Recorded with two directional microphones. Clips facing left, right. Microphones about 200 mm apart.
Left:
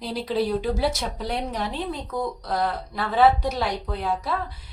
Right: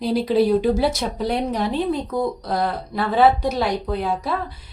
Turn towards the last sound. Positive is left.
turn(degrees=-15)  # may be behind; listen again after turning